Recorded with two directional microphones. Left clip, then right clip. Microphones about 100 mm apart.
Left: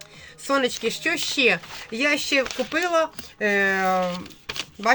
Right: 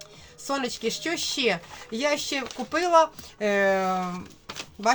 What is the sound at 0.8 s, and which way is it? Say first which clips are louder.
Speech: left 4 dB; 25° right (ahead or behind).